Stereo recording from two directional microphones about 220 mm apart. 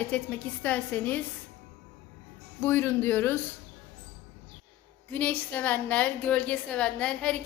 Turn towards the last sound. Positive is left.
turn(degrees=5)  # may be behind; listen again after turning